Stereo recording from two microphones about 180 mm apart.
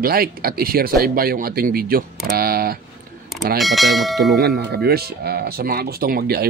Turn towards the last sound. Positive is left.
turn(degrees=-60)  # may be behind; listen again after turning